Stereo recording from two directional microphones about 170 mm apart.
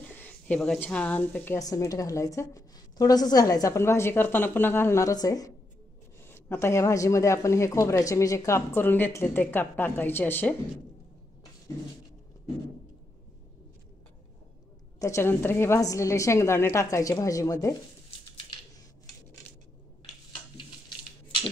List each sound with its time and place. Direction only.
0.0 s a woman's voice: 10° left (ahead or behind)
15.0 s a woman's voice: 15° left (ahead or behind)